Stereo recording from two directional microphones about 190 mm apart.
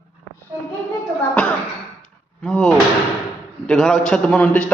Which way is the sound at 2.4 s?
5° left (ahead or behind).